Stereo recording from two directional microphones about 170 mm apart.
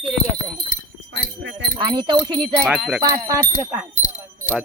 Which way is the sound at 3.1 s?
20° right (ahead or behind).